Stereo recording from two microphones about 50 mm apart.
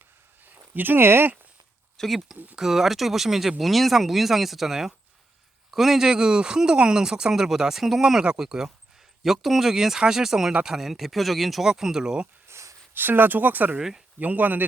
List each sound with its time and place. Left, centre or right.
0.4 s speech: right
2.0 s speech: centre
12.5 s a sound: right
12.9 s speech: right
13.7 s speech: centre
14.2 s speech: right